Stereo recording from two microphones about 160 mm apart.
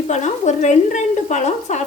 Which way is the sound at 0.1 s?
45° left (ahead or behind).